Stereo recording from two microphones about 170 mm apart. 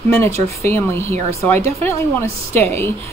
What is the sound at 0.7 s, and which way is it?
Speech, 15° left (ahead or behind).